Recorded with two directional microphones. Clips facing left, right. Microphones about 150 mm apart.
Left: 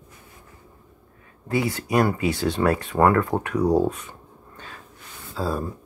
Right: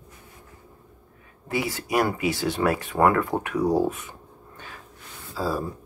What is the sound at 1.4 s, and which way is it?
Speech, 20° right (ahead or behind).